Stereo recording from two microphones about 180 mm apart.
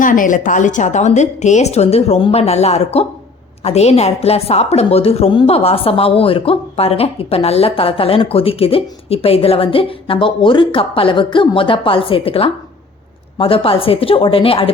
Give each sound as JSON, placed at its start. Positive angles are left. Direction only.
{"t": 0.0, "sound": "a woman's voice", "side_deg": 45}